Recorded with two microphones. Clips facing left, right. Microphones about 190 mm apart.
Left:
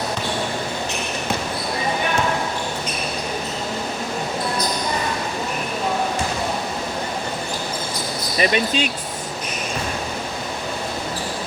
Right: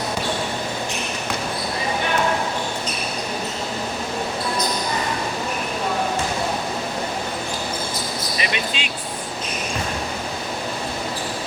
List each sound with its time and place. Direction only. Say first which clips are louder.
8.4 s speech: left 10 dB; 40° left (ahead or behind)